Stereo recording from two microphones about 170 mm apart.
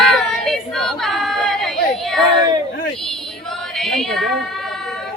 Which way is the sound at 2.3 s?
25° right (ahead or behind).